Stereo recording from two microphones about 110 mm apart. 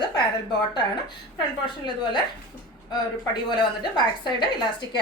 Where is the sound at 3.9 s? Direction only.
40° left (ahead or behind).